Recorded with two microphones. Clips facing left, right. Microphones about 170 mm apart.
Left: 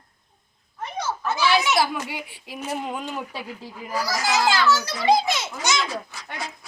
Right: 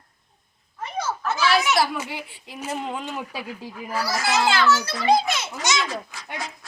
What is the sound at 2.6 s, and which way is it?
Speech, centre (ahead or behind).